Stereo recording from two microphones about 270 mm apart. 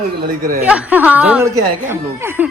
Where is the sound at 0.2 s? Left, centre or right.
Right.